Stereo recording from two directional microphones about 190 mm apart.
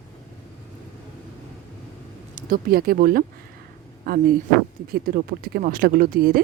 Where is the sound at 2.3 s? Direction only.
50° right (ahead or behind).